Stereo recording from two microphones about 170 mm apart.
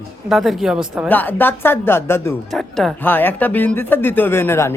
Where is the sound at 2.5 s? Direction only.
Centre (ahead or behind).